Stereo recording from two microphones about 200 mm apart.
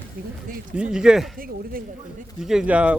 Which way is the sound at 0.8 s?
5° right (ahead or behind).